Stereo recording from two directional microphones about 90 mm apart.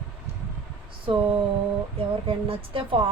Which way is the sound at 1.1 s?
90° right.